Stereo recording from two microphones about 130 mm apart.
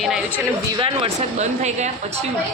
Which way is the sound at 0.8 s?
40° right (ahead or behind).